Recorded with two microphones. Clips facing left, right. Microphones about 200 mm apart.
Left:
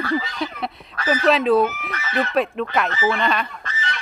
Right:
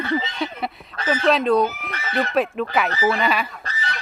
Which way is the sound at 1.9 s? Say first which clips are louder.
Even; 30° right (ahead or behind).